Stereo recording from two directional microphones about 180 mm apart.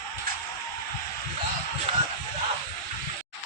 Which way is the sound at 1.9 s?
35° right (ahead or behind).